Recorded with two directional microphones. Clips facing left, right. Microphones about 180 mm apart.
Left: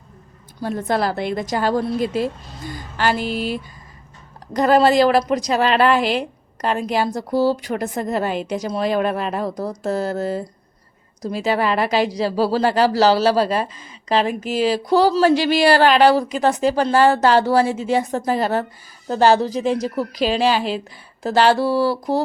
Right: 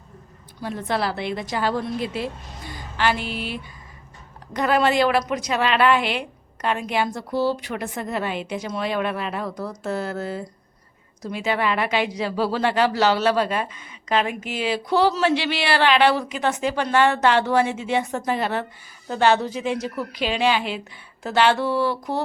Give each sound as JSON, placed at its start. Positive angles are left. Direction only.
{"t": 0.6, "sound": "a woman's voice", "side_deg": 45}